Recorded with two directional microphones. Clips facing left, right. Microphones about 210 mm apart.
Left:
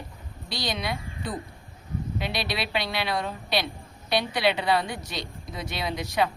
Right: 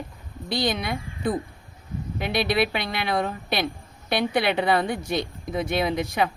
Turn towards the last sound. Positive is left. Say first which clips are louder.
# right 7 dB
turn(degrees=-50)  # may be behind; listen again after turning